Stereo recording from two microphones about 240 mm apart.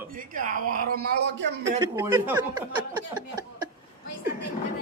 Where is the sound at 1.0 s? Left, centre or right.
Right.